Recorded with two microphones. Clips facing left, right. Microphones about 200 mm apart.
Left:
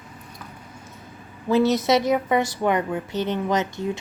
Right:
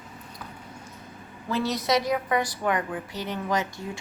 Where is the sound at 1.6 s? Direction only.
25° left (ahead or behind).